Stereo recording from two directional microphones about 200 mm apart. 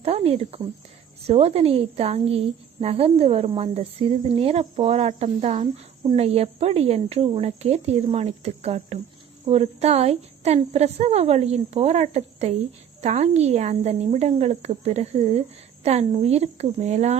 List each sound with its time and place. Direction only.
0.0 s a woman's voice: 30° right (ahead or behind)